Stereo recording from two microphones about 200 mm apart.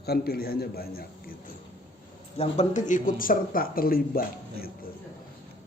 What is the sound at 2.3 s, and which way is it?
A man's voice, 30° left (ahead or behind).